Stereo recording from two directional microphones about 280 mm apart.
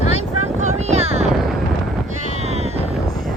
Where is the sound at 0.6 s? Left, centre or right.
Right.